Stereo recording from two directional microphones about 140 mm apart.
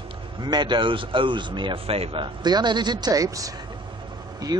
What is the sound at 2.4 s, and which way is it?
Speech, 30° right (ahead or behind).